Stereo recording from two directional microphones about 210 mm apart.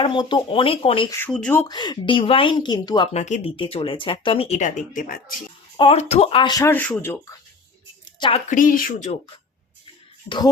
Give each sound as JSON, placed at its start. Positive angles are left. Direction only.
{"t": 0.0, "sound": "speech", "side_deg": 25}
{"t": 1.1, "sound": "speech", "side_deg": 5}
{"t": 1.6, "sound": "speech", "side_deg": 20}
{"t": 3.1, "sound": "speech", "side_deg": 35}
{"t": 5.7, "sound": "speech", "side_deg": 25}
{"t": 8.4, "sound": "speech", "side_deg": 40}
{"t": 10.2, "sound": "speech", "side_deg": 20}